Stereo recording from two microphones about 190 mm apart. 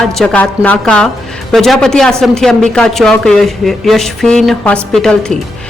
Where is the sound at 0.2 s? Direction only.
5° left (ahead or behind).